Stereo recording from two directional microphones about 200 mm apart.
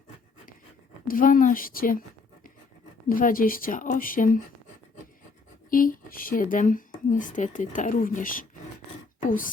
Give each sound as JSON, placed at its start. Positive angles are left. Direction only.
{"t": 1.0, "sound": "speech", "side_deg": 45}
{"t": 3.1, "sound": "speech", "side_deg": 45}
{"t": 5.7, "sound": "speech", "side_deg": 45}